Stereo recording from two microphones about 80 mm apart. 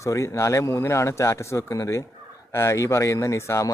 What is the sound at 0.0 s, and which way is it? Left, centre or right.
Speech, left.